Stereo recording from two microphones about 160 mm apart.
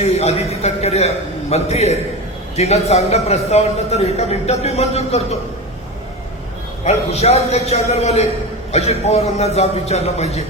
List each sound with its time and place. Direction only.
0.0 s a man's voice: 40° left (ahead or behind)
7.1 s a man's voice: 40° left (ahead or behind)